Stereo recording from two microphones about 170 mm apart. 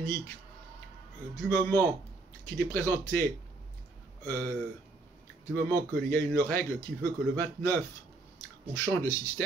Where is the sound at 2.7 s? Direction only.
15° left (ahead or behind).